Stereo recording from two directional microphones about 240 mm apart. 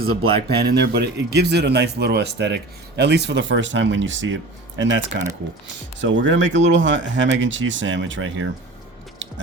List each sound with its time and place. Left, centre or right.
0.4 s speech: right